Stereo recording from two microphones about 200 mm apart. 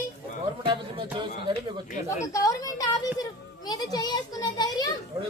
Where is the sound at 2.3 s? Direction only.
15° left (ahead or behind).